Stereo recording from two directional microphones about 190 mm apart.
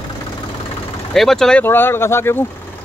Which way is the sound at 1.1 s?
Centre (ahead or behind).